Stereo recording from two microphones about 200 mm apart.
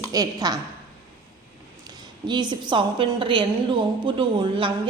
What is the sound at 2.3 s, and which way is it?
A woman's voice, 20° right (ahead or behind).